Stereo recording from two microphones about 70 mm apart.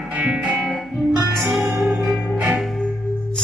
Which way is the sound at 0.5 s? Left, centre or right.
Centre.